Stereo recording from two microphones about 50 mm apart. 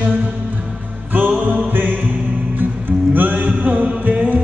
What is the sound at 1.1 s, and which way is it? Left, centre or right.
Music, right.